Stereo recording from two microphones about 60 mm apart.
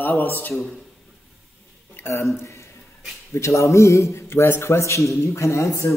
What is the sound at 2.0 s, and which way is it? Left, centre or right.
Speech, left.